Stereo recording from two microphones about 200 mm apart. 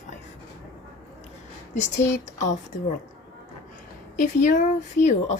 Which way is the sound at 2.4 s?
35° left (ahead or behind).